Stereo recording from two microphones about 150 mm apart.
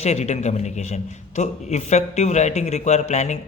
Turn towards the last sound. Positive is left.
turn(degrees=50)  # may be behind; listen again after turning